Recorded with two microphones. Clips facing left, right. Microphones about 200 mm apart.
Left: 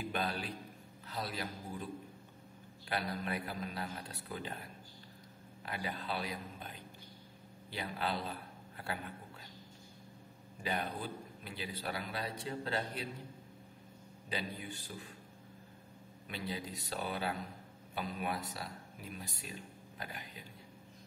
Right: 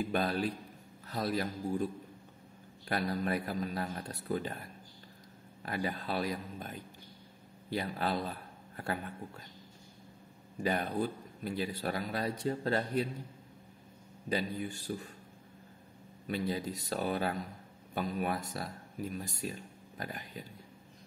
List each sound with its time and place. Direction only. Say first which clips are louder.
0.1 s a man's voice: right 6 dB; 45° right (ahead or behind)
2.9 s a man's voice: right 5 dB; 45° right (ahead or behind)
5.6 s a man's voice: right 5 dB; 45° right (ahead or behind)
8.7 s a sound: right 5 dB; 45° right (ahead or behind)
10.6 s a man's voice: right 7 dB; 45° right (ahead or behind)
14.3 s a man's voice: right 7 dB; 45° right (ahead or behind)
16.3 s a man's voice: right 7 dB; 45° right (ahead or behind)